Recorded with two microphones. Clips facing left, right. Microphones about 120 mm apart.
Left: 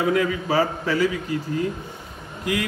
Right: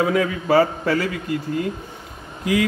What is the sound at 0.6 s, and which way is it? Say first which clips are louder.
Speech: right 4 dB; 50° right (ahead or behind).